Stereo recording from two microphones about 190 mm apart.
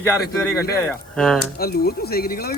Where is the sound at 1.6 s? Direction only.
55° left (ahead or behind).